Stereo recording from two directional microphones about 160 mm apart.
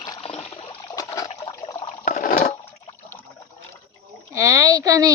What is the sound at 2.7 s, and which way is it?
Water, 40° left (ahead or behind).